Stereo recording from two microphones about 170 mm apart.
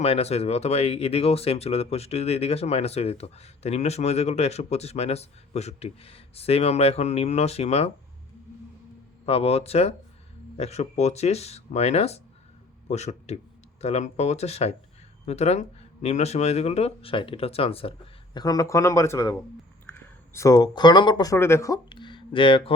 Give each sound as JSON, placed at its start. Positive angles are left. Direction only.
{"t": 0.0, "sound": "speech", "side_deg": 40}
{"t": 9.2, "sound": "speech", "side_deg": 35}